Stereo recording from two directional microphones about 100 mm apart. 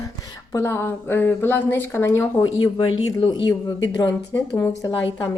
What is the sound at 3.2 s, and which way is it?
Speech, 60° left (ahead or behind).